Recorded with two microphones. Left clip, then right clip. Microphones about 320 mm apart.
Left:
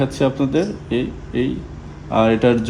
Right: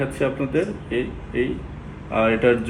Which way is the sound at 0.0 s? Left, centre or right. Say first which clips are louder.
Left 4 dB; left.